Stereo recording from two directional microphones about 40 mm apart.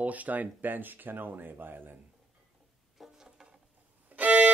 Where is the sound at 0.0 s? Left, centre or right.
Right.